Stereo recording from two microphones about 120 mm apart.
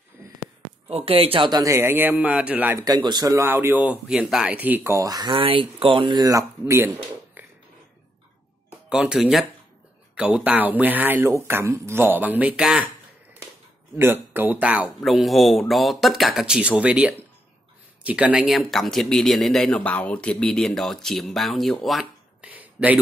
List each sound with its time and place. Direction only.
0.2 s a sound: 20° right (ahead or behind)
0.8 s speech: 55° right (ahead or behind)
1.5 s speech: 30° right (ahead or behind)
1.8 s speech: 15° right (ahead or behind)
2.8 s speech: 35° right (ahead or behind)
3.3 s speech: 20° right (ahead or behind)
4.9 s speech: 30° right (ahead or behind)
8.8 s speech: 5° right (ahead or behind)
13.9 s speech: 20° right (ahead or behind)
15.0 s speech: centre (ahead or behind)
21.8 s a sound: centre (ahead or behind)
22.5 s a sound: 15° right (ahead or behind)